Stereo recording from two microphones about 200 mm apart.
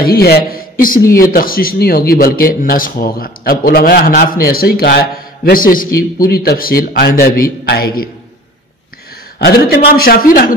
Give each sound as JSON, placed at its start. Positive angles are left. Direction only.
{"t": 0.0, "sound": "a man's voice", "side_deg": 50}
{"t": 9.9, "sound": "a man's voice", "side_deg": 45}